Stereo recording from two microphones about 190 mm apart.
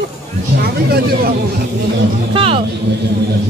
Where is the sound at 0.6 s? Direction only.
55° right (ahead or behind).